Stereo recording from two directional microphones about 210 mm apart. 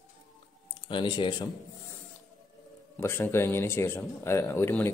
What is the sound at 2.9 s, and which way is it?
A man's voice, 10° left (ahead or behind).